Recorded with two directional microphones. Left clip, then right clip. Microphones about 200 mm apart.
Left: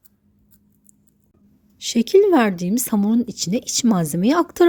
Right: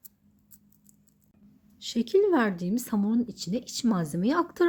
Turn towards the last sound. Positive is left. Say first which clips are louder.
# left 9 dB
turn(degrees=40)  # may be behind; listen again after turning